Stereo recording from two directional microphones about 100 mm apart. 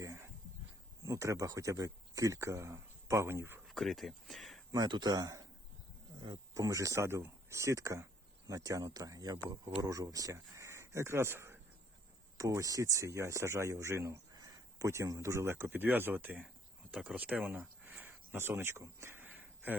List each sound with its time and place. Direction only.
0.0 s a sound: 30° right (ahead or behind)
1.0 s speech: 30° right (ahead or behind)
3.7 s speech: centre (ahead or behind)
4.7 s speech: 45° right (ahead or behind)
6.1 s speech: 45° right (ahead or behind); by 16.5 s 15° right (ahead or behind)
16.9 s speech: 5° right (ahead or behind)
17.8 s a sound: 20° right (ahead or behind)